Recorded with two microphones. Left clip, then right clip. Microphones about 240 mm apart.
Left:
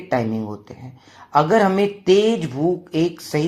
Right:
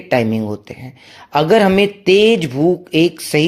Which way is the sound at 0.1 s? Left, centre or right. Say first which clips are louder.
Right 6 dB; right.